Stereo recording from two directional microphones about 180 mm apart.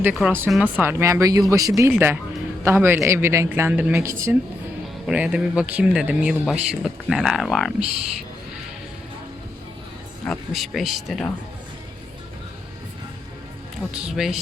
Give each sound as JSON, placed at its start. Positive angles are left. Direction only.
{"t": 0.0, "sound": "speech", "side_deg": -5}
{"t": 10.2, "sound": "speech", "side_deg": 0}
{"t": 13.9, "sound": "speech", "side_deg": -5}